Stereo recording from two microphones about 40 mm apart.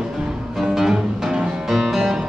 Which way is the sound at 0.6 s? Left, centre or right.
Centre.